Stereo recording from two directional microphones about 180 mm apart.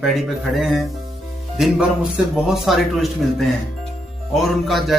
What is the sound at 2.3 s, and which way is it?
A man's voice, centre (ahead or behind).